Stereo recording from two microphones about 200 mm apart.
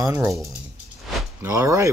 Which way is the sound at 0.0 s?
15° right (ahead or behind).